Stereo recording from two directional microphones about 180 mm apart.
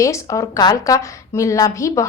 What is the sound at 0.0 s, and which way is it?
A woman's voice, 15° left (ahead or behind).